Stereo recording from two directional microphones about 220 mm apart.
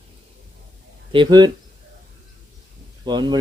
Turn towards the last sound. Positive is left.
turn(degrees=-20)  # may be behind; listen again after turning